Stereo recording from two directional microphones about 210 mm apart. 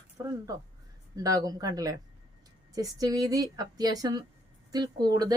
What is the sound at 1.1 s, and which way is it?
A woman's voice, 15° right (ahead or behind).